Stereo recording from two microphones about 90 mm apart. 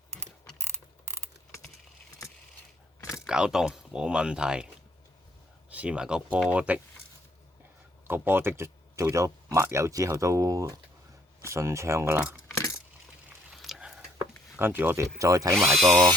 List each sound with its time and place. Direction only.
3.2 s speech: 10° right (ahead or behind)
5.7 s speech: 15° right (ahead or behind)
8.0 s speech: 25° right (ahead or behind)
13.5 s a sound: 5° right (ahead or behind)
14.6 s speech: 20° right (ahead or behind)
15.2 s speech: 40° right (ahead or behind)
15.5 s speech: centre (ahead or behind)